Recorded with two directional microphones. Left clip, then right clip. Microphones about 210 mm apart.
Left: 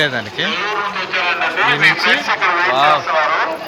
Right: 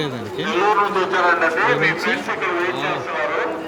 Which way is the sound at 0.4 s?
45° right (ahead or behind).